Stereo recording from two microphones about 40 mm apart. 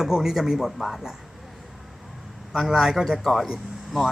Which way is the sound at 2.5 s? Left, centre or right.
Centre.